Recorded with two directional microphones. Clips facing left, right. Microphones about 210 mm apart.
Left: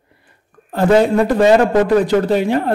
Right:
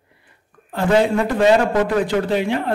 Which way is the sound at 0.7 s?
40° left (ahead or behind).